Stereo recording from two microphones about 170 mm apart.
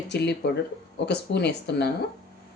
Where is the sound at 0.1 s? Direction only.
80° left.